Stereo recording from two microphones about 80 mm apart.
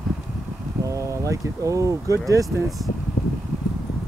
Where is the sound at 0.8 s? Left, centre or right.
Right.